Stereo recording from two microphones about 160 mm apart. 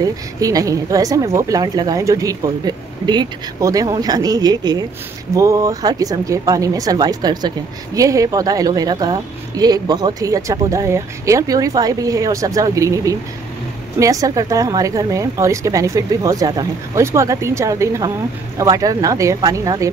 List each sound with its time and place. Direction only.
0.0 s speech: 20° right (ahead or behind)